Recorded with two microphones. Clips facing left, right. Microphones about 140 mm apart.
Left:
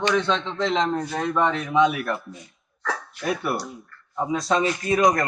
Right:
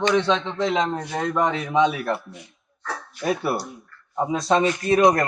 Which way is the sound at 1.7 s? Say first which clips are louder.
Even; 30° right (ahead or behind).